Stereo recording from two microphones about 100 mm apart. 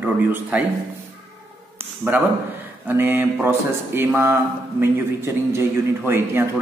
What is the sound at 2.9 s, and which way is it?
Speech, 20° right (ahead or behind).